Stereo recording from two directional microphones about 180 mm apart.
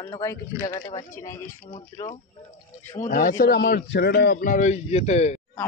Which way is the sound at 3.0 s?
50° left (ahead or behind).